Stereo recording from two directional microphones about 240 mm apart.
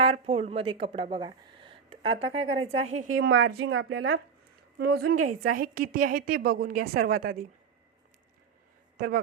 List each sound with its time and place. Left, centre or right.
0.0 s speech: right
2.3 s speech: right
2.6 s a woman's voice: right
3.2 s speech: right
5.4 s a woman's voice: right
9.0 s speech: right